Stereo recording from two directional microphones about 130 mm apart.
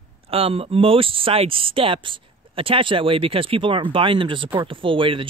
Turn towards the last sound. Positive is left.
turn(degrees=-40)  # may be behind; listen again after turning